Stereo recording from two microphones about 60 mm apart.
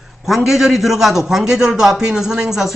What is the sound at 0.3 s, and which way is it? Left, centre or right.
A man's voice, centre.